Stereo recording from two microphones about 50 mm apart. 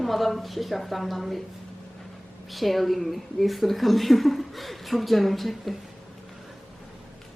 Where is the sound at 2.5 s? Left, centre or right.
Centre.